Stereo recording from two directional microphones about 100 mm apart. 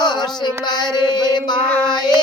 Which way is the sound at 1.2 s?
45° left (ahead or behind).